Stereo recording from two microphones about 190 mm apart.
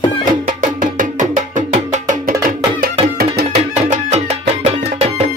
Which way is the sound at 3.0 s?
55° right (ahead or behind).